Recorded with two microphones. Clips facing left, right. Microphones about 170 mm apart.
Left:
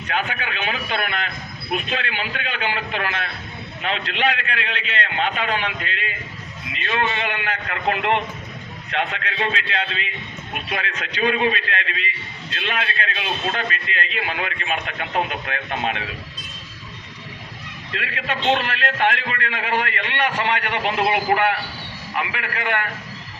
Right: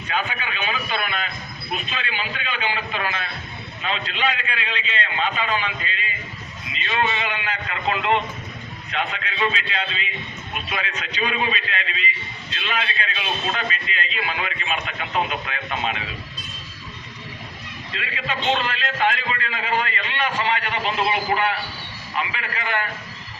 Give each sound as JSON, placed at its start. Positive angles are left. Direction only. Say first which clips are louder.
{"t": 0.1, "sound": "a sound", "louder": "left 1 dB", "side_deg": 65}
{"t": 1.7, "sound": "a man's voice", "louder": "left 4 dB", "side_deg": 60}
{"t": 17.9, "sound": "a man's voice", "louder": "left 2 dB", "side_deg": 60}